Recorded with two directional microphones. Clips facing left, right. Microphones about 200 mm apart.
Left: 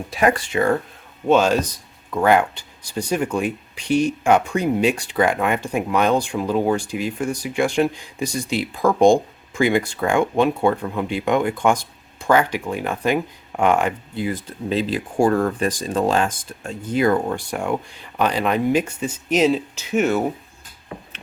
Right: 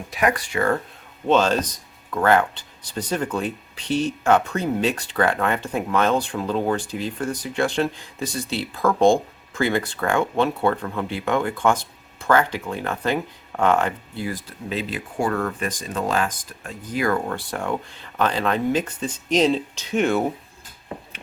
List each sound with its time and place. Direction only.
0.1 s speech: 30° left (ahead or behind); by 20.2 s 5° left (ahead or behind)